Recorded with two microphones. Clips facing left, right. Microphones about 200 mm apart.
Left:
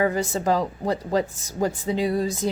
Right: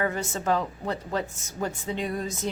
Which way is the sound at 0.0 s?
30° left (ahead or behind).